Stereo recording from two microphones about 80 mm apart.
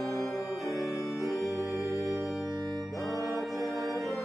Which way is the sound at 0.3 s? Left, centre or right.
Centre.